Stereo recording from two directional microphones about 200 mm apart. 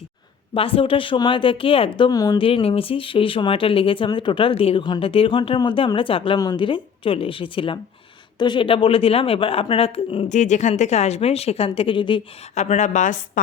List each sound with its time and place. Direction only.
0.5 s speech: 25° left (ahead or behind)